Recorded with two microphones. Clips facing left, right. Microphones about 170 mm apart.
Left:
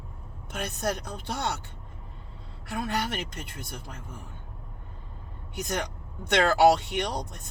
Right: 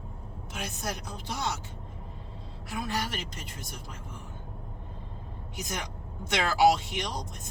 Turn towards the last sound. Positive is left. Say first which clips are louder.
# left 4 dB
turn(degrees=65)  # may be behind; listen again after turning